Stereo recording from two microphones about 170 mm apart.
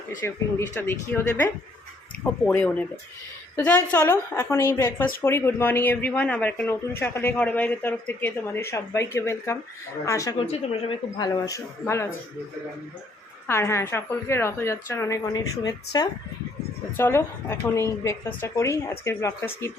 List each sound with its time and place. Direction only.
0.7 s speech: 10° left (ahead or behind)
2.5 s a woman's voice: 10° left (ahead or behind)
10.3 s speech: 35° left (ahead or behind)
11.4 s speech: 20° left (ahead or behind)
13.5 s speech: 15° left (ahead or behind)